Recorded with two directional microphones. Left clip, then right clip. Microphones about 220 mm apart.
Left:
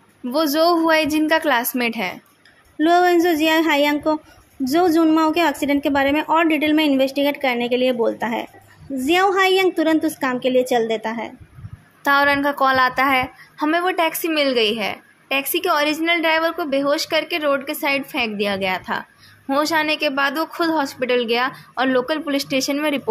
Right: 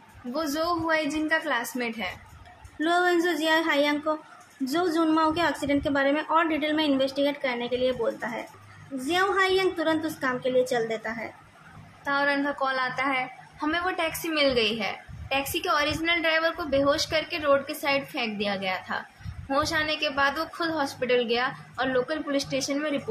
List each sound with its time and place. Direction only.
0.3 s a woman's voice: 40° left (ahead or behind)